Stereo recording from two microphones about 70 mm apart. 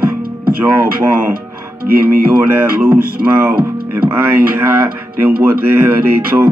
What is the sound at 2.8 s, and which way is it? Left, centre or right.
Speech, right.